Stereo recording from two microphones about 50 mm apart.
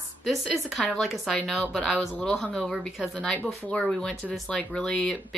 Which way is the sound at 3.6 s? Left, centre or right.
Left.